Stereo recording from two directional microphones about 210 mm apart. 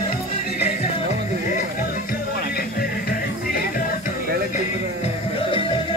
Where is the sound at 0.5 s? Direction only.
35° left (ahead or behind).